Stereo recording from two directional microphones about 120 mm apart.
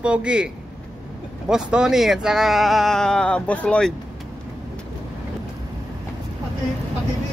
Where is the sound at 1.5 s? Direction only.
5° right (ahead or behind); by 3.9 s 10° left (ahead or behind).